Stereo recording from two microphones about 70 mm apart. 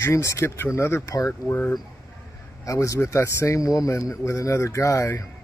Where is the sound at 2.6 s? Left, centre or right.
Left.